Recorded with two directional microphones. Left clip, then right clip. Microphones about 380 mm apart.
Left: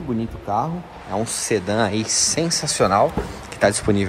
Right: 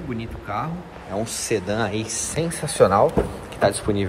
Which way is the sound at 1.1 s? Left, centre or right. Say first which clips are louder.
Left 2 dB; centre.